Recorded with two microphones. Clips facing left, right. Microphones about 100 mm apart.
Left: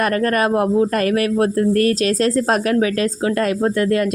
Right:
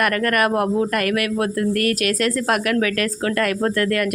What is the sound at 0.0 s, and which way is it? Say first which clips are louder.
Speech: left 2 dB; 25° left (ahead or behind).